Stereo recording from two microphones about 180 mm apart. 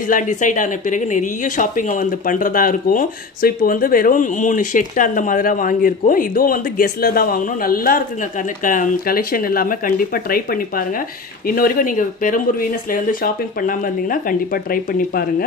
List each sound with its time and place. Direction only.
0.1 s speech: 45° left (ahead or behind)